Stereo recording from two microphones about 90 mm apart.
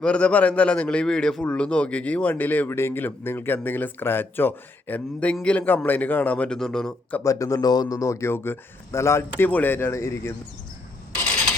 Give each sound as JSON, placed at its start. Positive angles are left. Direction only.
{"t": 0.0, "sound": "a man's voice", "side_deg": 10}
{"t": 7.3, "sound": "speech", "side_deg": 35}
{"t": 9.5, "sound": "speech", "side_deg": 20}